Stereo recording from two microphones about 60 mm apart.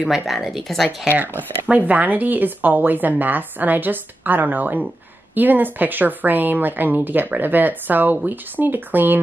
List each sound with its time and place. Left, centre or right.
0.0 s speech: centre
1.7 s speech: right